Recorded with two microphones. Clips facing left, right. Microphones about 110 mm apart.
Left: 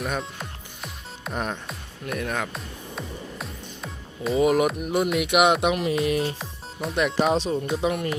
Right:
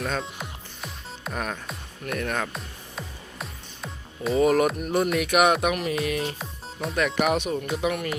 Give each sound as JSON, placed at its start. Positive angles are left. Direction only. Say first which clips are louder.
{"t": 0.2, "sound": "music", "louder": "even", "side_deg": 0}
{"t": 2.2, "sound": "speech", "louder": "even", "side_deg": 10}
{"t": 2.5, "sound": "music", "louder": "left 2 dB", "side_deg": 0}
{"t": 4.8, "sound": "speech", "louder": "even", "side_deg": 10}